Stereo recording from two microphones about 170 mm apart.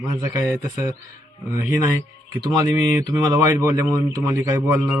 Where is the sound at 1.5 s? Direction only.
50° left (ahead or behind).